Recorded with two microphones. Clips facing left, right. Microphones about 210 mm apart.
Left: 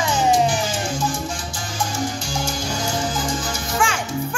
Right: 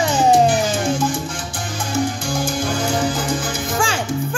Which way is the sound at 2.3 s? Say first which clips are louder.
Right 4 dB; 55° right (ahead or behind).